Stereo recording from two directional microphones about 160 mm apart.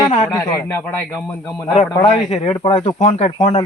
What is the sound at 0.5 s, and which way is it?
A man's voice, 15° left (ahead or behind).